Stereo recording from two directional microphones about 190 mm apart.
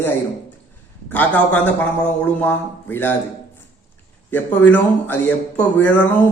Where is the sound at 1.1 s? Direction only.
10° left (ahead or behind).